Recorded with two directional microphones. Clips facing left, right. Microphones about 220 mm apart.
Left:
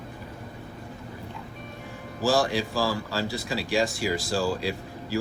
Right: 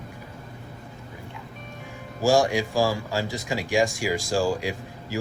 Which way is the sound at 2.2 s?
15° right (ahead or behind).